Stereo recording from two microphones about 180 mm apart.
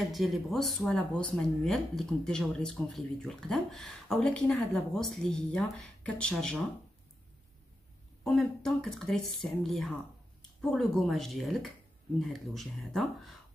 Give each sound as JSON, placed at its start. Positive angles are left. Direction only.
{"t": 0.1, "sound": "speech", "side_deg": 0}
{"t": 8.2, "sound": "speech", "side_deg": 5}